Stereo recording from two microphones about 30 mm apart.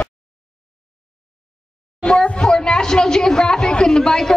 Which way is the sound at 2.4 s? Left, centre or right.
Left.